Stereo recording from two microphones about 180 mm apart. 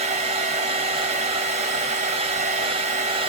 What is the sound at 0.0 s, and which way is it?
Hair dryer, 35° right (ahead or behind).